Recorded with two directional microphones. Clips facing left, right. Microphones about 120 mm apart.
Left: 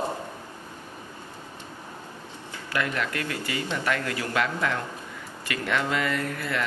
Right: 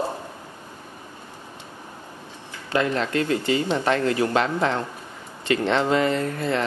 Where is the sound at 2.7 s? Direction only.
25° right (ahead or behind).